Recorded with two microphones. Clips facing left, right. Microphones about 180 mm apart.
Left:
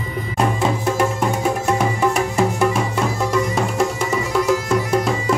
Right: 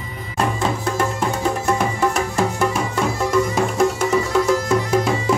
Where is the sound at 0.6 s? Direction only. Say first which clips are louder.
Left 2 dB; 10° left (ahead or behind).